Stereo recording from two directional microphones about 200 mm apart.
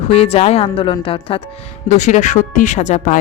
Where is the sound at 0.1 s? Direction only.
30° left (ahead or behind).